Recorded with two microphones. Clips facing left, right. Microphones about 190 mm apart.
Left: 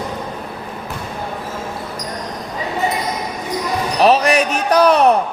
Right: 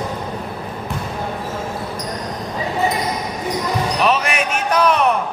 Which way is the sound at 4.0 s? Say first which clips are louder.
Left 8 dB; 35° left (ahead or behind).